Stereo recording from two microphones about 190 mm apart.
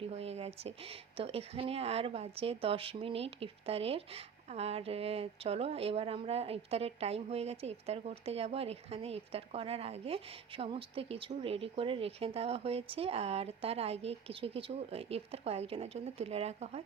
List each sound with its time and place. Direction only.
0.1 s speech: 35° right (ahead or behind)